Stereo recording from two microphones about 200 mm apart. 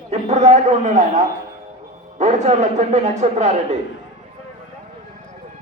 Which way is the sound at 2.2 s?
35° right (ahead or behind).